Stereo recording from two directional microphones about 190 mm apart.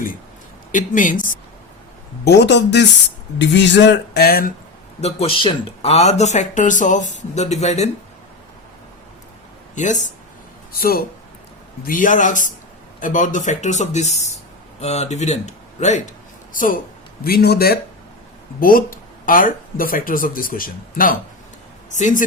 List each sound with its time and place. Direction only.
0.7 s speech: 45° left (ahead or behind)
2.2 s speech: 65° left (ahead or behind)
4.9 s speech: 30° left (ahead or behind)
9.7 s speech: 40° left (ahead or behind)
10.7 s a man's voice: 50° left (ahead or behind)